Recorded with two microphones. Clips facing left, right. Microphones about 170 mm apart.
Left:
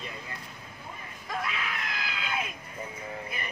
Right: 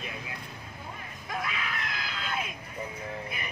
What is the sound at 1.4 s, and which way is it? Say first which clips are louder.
Screaming: even; centre (ahead or behind).